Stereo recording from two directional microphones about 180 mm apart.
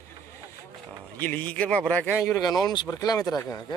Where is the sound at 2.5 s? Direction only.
20° left (ahead or behind).